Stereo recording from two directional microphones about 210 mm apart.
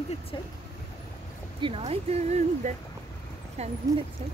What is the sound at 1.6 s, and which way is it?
Speech, 25° right (ahead or behind).